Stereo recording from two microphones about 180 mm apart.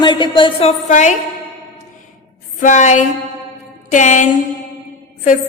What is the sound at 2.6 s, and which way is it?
Speech, 45° left (ahead or behind).